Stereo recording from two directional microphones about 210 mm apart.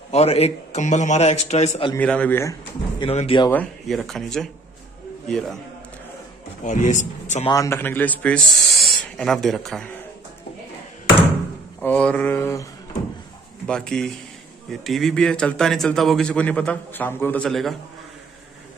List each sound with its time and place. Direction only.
0.1 s a man's voice: 30° left (ahead or behind)
2.0 s mantra: 5° left (ahead or behind)
3.0 s speech: 25° left (ahead or behind)
3.4 s a man's voice: 5° left (ahead or behind)
6.6 s a man's voice: 35° left (ahead or behind)
7.4 s speech: 15° left (ahead or behind)
11.8 s mantra: 5° left (ahead or behind)
13.7 s a man's voice: 5° left (ahead or behind)